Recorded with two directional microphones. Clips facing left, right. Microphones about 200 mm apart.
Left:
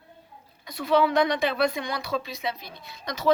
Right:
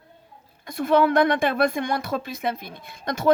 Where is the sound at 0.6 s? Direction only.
50° right (ahead or behind).